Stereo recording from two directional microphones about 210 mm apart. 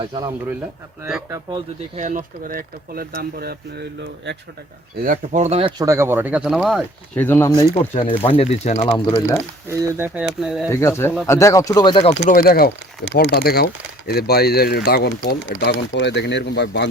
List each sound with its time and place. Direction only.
0.0 s speech: 20° right (ahead or behind)
1.3 s speech: 20° right (ahead or behind)
2.0 s speech: 35° right (ahead or behind)
5.0 s speech: 40° right (ahead or behind)
5.8 s speech: 15° right (ahead or behind)
7.2 s speech: 10° left (ahead or behind)
7.7 s speech: 25° left (ahead or behind)
9.6 s speech: 10° right (ahead or behind)
10.7 s speech: 15° left (ahead or behind)
12.3 s speech: 45° left (ahead or behind)